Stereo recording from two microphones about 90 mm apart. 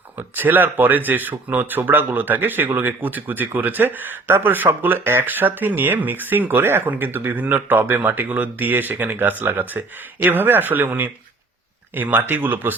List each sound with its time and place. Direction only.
0.2 s speech: 20° right (ahead or behind)